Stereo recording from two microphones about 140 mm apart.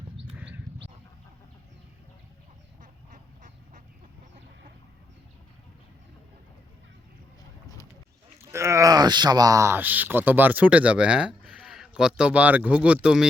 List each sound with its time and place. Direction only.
0.3 s horse: 10° right (ahead or behind)
2.8 s goose: 65° right (ahead or behind)
8.4 s speech: 20° right (ahead or behind)